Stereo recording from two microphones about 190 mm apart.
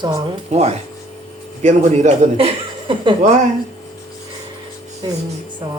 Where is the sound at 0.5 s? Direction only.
35° right (ahead or behind).